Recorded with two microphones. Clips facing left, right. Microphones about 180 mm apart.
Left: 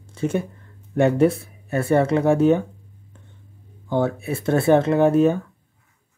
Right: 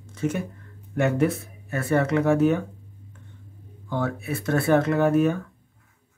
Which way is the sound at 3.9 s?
30° left (ahead or behind).